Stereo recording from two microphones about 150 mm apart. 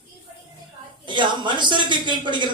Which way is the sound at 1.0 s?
30° right (ahead or behind).